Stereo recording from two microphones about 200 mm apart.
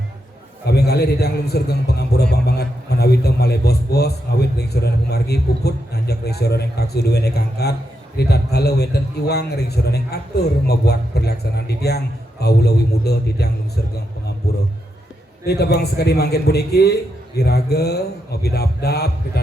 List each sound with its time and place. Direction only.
0.6 s a man's voice: 55° left (ahead or behind)
14.5 s a sound: 55° left (ahead or behind)
15.4 s a man's voice: 55° left (ahead or behind)